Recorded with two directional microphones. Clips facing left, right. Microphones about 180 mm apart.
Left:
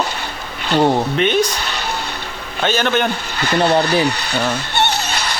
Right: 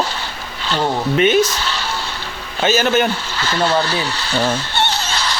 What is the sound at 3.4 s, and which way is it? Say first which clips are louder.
Speech: left 3 dB; 20° left (ahead or behind).